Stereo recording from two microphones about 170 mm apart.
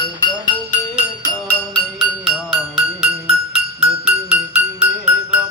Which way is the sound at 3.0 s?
35° right (ahead or behind).